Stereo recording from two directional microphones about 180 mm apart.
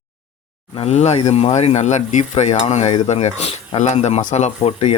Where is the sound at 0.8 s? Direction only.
35° left (ahead or behind).